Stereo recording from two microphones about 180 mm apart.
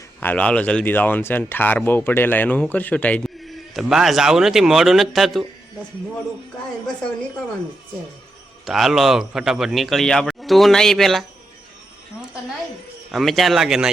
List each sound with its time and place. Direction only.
0.2 s speech: 10° left (ahead or behind)
8.6 s a man's voice: centre (ahead or behind)
13.1 s a man's voice: centre (ahead or behind)